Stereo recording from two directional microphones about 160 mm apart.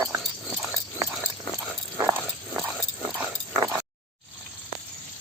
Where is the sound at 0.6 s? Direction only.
20° right (ahead or behind).